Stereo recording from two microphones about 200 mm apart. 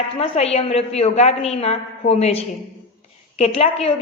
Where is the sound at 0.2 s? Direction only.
30° left (ahead or behind).